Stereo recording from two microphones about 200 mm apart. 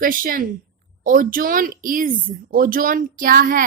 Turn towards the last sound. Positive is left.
turn(degrees=-45)  # may be behind; listen again after turning